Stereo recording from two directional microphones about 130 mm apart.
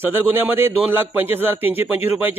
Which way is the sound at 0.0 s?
15° right (ahead or behind).